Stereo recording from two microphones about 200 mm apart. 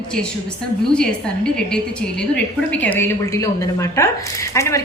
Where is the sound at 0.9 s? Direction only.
5° left (ahead or behind).